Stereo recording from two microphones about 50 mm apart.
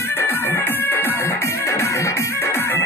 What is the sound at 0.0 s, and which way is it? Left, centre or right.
Music, left.